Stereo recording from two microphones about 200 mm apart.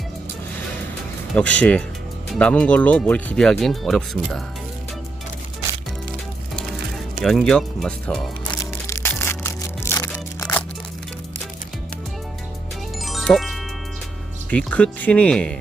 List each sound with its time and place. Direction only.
1.4 s speech: 5° left (ahead or behind)
7.3 s speech: 5° left (ahead or behind)
9.0 s music: 10° left (ahead or behind)
13.0 s music: centre (ahead or behind)
14.5 s speech: 5° left (ahead or behind)